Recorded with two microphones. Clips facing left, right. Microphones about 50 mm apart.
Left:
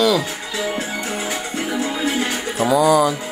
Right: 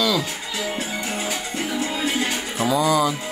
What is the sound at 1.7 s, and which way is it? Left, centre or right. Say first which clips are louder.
Music: left 3 dB; left.